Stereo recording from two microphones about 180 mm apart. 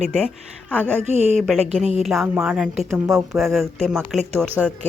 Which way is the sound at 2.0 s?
Centre (ahead or behind).